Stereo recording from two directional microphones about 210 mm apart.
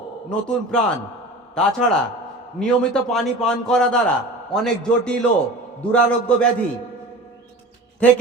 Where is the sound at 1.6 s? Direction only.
5° left (ahead or behind).